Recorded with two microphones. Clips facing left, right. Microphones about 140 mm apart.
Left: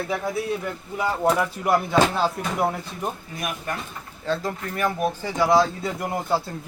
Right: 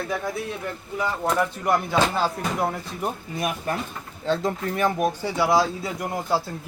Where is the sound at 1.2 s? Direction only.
5° left (ahead or behind).